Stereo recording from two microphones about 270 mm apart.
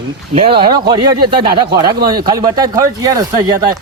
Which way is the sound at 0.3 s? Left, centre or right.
Right.